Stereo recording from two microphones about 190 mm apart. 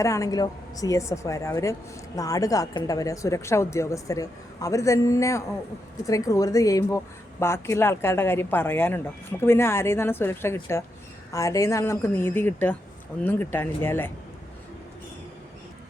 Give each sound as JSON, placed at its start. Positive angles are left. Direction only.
{"t": 0.0, "sound": "speech", "side_deg": 15}